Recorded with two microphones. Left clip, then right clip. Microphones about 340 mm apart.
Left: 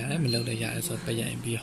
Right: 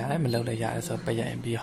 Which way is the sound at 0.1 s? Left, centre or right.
Right.